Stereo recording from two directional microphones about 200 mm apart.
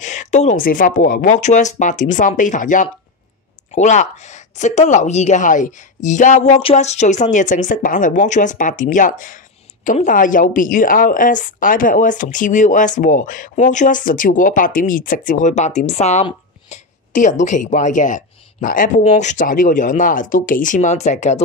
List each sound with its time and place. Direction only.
0.0 s a woman's voice: 35° left (ahead or behind)